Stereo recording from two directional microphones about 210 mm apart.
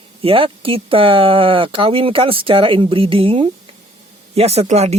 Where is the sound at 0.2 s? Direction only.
25° right (ahead or behind).